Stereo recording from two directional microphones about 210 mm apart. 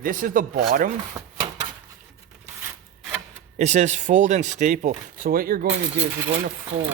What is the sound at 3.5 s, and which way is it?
Speech, 35° right (ahead or behind).